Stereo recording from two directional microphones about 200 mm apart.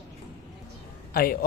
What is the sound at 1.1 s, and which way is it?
Speech, 45° left (ahead or behind).